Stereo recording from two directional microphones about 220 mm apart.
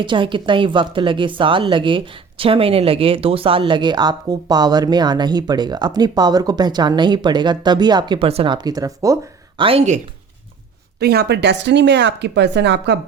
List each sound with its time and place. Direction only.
0.0 s speech: 20° right (ahead or behind)
11.0 s speech: 45° right (ahead or behind)